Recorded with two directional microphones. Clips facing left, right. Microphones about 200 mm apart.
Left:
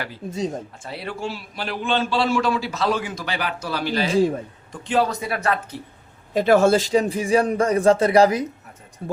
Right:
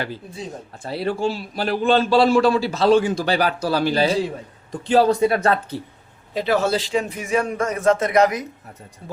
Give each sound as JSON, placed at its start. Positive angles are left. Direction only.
{"t": 0.2, "sound": "speech", "side_deg": 45}
{"t": 0.8, "sound": "a man's voice", "side_deg": -35}
{"t": 6.3, "sound": "speech", "side_deg": 50}
{"t": 7.1, "sound": "a man's voice", "side_deg": 30}